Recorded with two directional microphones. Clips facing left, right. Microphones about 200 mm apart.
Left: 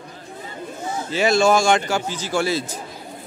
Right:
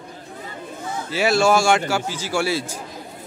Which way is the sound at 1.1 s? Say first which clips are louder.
Left 1 dB; 5° right (ahead or behind).